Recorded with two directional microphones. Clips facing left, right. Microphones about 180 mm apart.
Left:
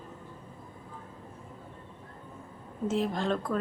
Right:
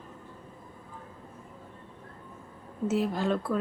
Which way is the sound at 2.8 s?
5° right (ahead or behind).